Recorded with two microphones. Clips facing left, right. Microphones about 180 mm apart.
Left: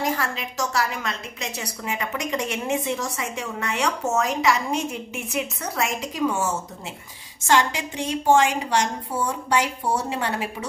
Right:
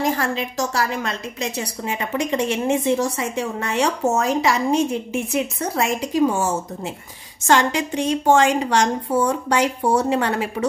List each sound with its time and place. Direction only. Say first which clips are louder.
0.2 s a woman's voice: right 5 dB; 35° right (ahead or behind)
7.4 s a woman's voice: right 3 dB; 55° right (ahead or behind)
8.3 s a woman's voice: right 2 dB; 75° right (ahead or behind)
9.6 s a woman's voice: right 7 dB; 60° right (ahead or behind)